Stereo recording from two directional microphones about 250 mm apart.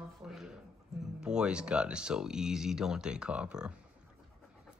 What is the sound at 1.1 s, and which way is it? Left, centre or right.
Speech, centre.